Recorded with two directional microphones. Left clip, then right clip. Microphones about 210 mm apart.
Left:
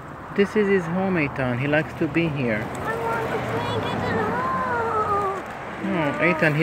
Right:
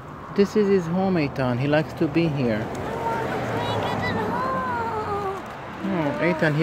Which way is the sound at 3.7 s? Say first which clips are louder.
Even; 25° right (ahead or behind).